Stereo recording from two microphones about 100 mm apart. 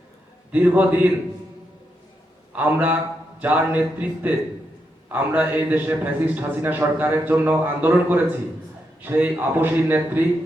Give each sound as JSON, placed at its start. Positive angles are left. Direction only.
{"t": 0.5, "sound": "speech", "side_deg": -15}
{"t": 2.6, "sound": "a man's voice", "side_deg": -20}